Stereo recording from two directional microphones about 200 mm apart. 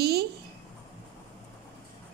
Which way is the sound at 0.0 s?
55° right (ahead or behind).